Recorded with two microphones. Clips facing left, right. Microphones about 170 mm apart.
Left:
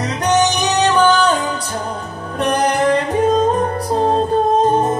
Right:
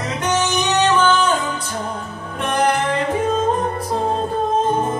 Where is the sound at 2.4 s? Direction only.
40° left (ahead or behind).